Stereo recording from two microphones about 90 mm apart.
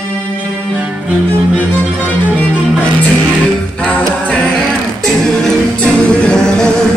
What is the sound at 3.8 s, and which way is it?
A capella, 10° left (ahead or behind).